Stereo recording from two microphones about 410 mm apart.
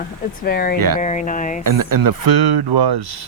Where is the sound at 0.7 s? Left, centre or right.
Right.